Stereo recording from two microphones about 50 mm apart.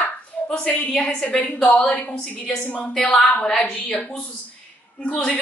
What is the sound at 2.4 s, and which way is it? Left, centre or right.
A woman's voice, centre.